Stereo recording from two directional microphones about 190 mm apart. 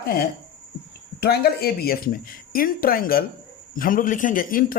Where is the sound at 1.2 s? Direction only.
55° left (ahead or behind).